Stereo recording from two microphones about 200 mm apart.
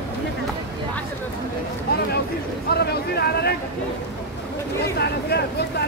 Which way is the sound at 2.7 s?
55° left (ahead or behind).